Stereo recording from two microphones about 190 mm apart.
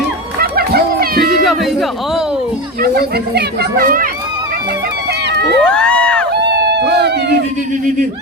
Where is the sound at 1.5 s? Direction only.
Centre (ahead or behind).